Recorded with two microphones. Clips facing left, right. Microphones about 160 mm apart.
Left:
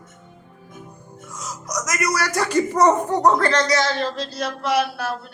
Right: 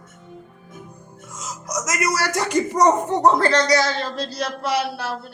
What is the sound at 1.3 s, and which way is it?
Speech, 25° right (ahead or behind).